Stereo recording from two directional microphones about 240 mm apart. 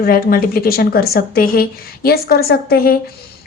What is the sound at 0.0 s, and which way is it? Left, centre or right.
A woman's voice, left.